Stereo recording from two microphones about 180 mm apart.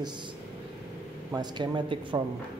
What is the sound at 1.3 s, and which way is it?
Speech, 25° right (ahead or behind).